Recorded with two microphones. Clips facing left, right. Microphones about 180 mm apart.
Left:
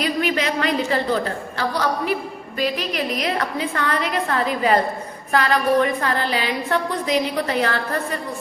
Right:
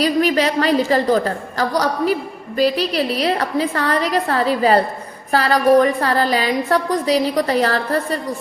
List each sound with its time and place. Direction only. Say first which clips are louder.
0.0 s a woman's voice: right 5 dB; 35° right (ahead or behind)